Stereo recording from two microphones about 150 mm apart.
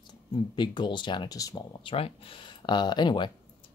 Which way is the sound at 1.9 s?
40° left (ahead or behind).